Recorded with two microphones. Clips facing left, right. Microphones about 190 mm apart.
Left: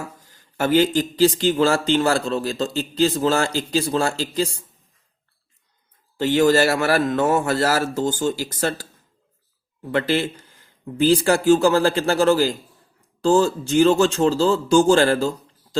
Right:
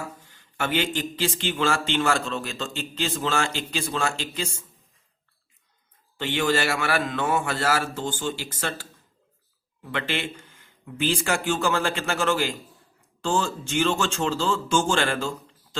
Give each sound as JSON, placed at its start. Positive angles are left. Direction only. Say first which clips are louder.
{"t": 0.3, "sound": "a sound", "louder": "left 9 dB", "side_deg": 40}
{"t": 0.9, "sound": "a man's voice", "louder": "left 10 dB", "side_deg": 40}
{"t": 6.1, "sound": "a man's voice", "louder": "left 8 dB", "side_deg": 40}